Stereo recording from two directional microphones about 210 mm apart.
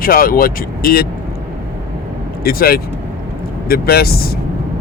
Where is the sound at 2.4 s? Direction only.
45° left (ahead or behind).